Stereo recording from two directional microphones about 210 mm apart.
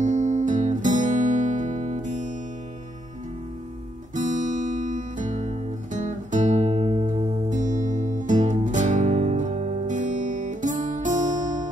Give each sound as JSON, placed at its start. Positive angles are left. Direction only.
{"t": 0.0, "sound": "music", "side_deg": -35}
{"t": 4.1, "sound": "guitar", "side_deg": -35}